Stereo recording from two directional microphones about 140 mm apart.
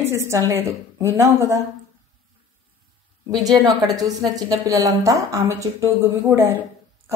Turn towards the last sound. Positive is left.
turn(degrees=-20)  # may be behind; listen again after turning